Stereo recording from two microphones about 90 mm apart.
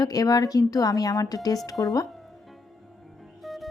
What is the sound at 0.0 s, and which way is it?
A woman's voice, 45° left (ahead or behind).